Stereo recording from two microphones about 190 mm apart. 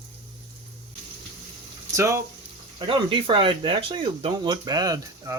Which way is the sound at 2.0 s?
15° right (ahead or behind).